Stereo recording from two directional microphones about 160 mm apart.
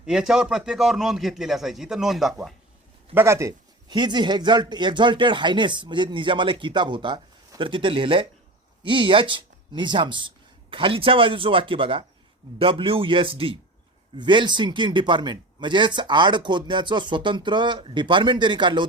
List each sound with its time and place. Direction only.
0.0 s a man's voice: 5° right (ahead or behind)
3.2 s speech: 15° right (ahead or behind)